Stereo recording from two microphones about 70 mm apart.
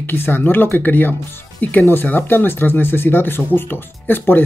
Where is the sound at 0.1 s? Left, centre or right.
Left.